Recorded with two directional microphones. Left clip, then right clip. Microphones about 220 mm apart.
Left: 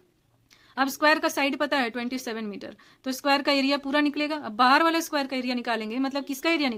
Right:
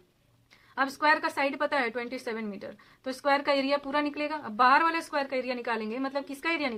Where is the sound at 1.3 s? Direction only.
55° left (ahead or behind).